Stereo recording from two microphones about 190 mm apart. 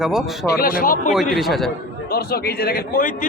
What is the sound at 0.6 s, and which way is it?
Speech, 50° left (ahead or behind).